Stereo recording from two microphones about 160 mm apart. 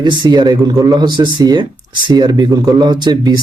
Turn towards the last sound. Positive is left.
turn(degrees=-25)  # may be behind; listen again after turning